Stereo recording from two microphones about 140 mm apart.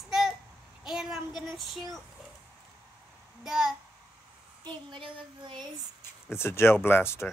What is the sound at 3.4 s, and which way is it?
Speech, 5° right (ahead or behind).